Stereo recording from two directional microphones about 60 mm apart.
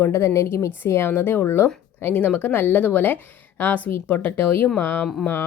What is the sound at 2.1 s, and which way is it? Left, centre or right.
A woman's voice, left.